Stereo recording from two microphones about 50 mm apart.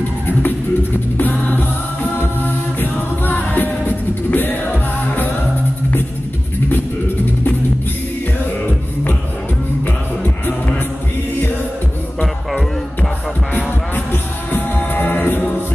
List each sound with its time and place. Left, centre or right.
0.3 s music: left
2.1 s a capella: left
9.8 s music: left
13.5 s music: left